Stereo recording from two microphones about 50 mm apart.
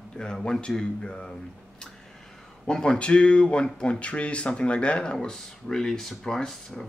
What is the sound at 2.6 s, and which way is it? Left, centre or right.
Speech, centre.